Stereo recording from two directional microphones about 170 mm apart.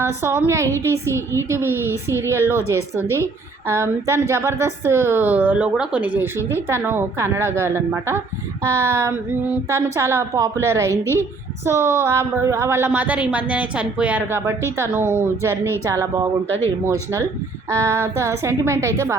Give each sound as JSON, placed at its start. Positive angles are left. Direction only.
{"t": 0.0, "sound": "a woman's voice", "side_deg": -15}
{"t": 16.5, "sound": "speech", "side_deg": 15}
{"t": 16.8, "sound": "a woman's voice", "side_deg": -20}